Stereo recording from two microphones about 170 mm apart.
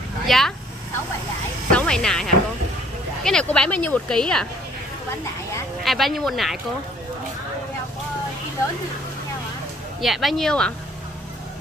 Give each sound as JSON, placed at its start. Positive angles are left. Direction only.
{"t": 0.3, "sound": "speech", "side_deg": 0}
{"t": 1.7, "sound": "speech", "side_deg": 5}
{"t": 5.9, "sound": "speech", "side_deg": 0}
{"t": 10.0, "sound": "speech", "side_deg": 0}